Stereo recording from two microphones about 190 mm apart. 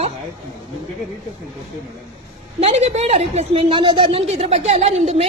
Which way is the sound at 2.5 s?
35° right (ahead or behind).